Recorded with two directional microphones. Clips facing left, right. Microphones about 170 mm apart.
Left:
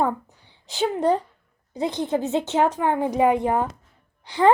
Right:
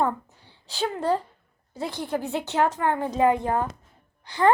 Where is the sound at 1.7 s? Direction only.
20° left (ahead or behind).